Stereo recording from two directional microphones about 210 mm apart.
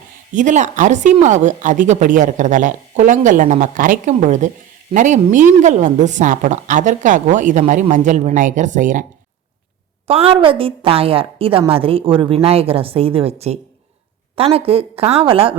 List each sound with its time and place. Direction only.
0.3 s speech: 35° right (ahead or behind)
10.1 s a woman's voice: 25° right (ahead or behind)